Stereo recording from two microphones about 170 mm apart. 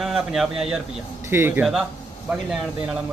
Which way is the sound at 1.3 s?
15° right (ahead or behind).